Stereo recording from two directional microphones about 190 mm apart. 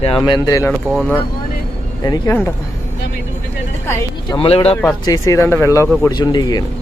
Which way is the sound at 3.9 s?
20° left (ahead or behind).